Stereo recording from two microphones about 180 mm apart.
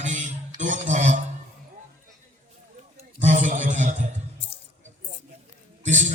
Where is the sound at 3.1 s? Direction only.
40° right (ahead or behind).